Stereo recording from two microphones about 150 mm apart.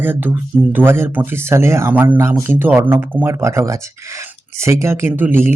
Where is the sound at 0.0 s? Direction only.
15° right (ahead or behind).